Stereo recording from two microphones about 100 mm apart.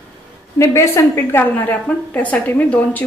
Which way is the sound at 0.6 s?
25° left (ahead or behind).